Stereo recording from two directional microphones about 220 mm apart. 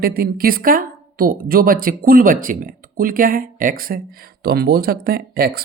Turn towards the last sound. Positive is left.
turn(degrees=-45)  # may be behind; listen again after turning